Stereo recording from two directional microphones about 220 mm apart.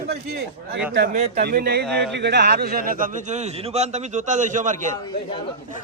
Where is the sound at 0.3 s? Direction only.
45° right (ahead or behind).